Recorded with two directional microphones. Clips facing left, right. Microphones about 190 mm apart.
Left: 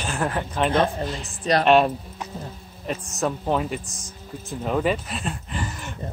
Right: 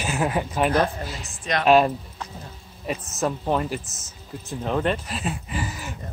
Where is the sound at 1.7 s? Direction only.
Centre (ahead or behind).